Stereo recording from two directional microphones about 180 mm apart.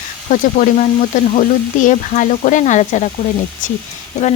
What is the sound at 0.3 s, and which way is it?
Speech, 45° left (ahead or behind).